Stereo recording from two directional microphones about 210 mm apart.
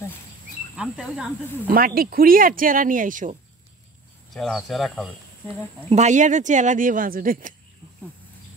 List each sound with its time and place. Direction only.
0.7 s speech: 5° right (ahead or behind)
1.7 s speech: 45° right (ahead or behind)
4.3 s speech: centre (ahead or behind)
5.9 s speech: 35° right (ahead or behind)